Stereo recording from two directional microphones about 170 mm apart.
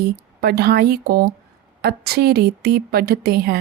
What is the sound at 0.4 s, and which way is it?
A woman's voice, 65° right (ahead or behind).